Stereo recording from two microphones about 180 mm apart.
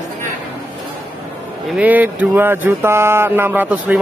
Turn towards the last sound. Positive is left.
turn(degrees=-10)  # may be behind; listen again after turning